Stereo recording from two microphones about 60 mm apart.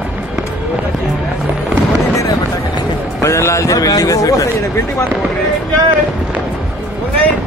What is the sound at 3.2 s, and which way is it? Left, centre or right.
A man's voice, left.